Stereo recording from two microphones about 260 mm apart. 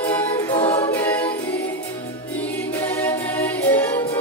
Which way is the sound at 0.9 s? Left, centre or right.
Centre.